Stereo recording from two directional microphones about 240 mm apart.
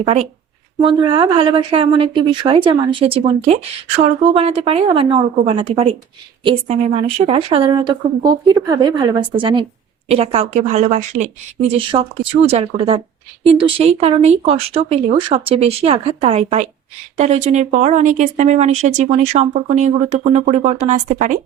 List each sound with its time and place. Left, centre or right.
0.0 s speech: right